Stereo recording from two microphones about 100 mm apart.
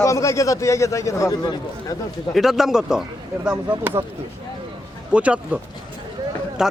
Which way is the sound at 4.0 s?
25° right (ahead or behind).